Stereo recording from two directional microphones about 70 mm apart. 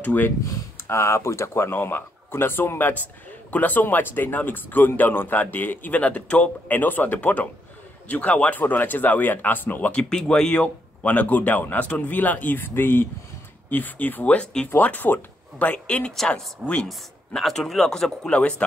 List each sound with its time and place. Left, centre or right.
0.0 s speech: left
0.5 s speech: left; by 16.1 s centre
16.1 s speech: centre